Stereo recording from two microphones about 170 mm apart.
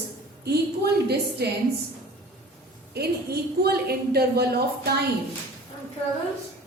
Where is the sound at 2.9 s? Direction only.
70° right (ahead or behind).